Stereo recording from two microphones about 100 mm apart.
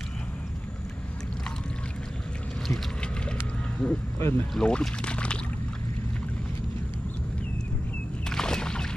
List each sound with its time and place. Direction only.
2.7 s boat: 10° left (ahead or behind)
3.7 s speech: 10° left (ahead or behind)
4.2 s speech: 25° left (ahead or behind)
4.6 s speech: 10° left (ahead or behind)
8.3 s a sound: 5° left (ahead or behind)